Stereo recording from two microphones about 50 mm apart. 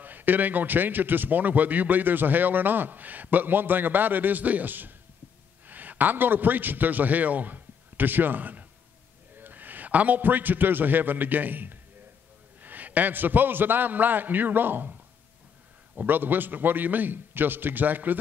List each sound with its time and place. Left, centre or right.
0.0 s a man's voice: right
16.1 s a man's voice: right